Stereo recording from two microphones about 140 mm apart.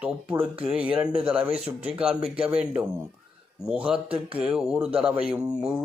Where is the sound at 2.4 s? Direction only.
10° right (ahead or behind).